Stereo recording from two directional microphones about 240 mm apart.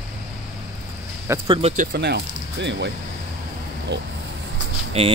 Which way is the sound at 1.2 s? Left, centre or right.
Centre.